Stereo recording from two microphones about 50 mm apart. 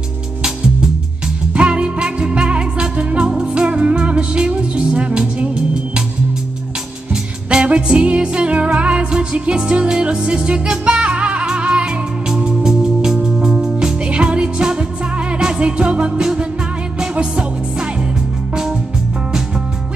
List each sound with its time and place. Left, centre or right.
1.5 s music: right
7.4 s music: right